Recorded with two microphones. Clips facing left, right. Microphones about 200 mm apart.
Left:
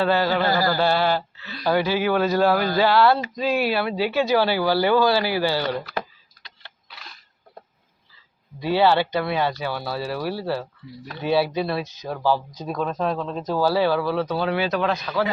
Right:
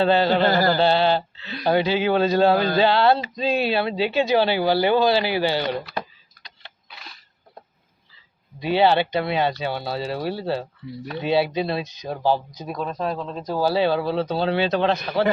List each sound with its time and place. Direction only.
0.0 s speech: 25° right (ahead or behind)
8.6 s speech: 20° right (ahead or behind)
12.5 s speech: 10° right (ahead or behind)
13.5 s speech: 15° right (ahead or behind)